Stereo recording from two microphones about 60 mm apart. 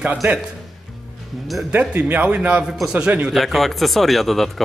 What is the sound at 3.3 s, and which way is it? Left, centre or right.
A man's voice, centre.